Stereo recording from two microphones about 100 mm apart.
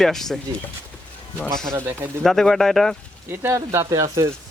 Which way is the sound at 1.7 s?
25° right (ahead or behind).